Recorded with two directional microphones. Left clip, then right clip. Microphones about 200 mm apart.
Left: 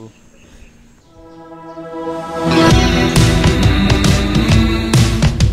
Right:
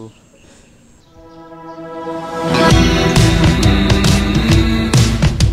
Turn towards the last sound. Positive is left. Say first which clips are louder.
# even
turn(degrees=0)  # may be behind; listen again after turning